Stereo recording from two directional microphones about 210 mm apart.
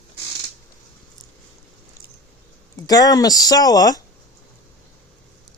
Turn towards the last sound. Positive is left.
turn(degrees=20)  # may be behind; listen again after turning